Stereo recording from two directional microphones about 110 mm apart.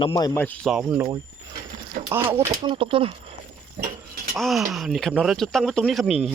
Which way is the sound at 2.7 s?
55° right (ahead or behind).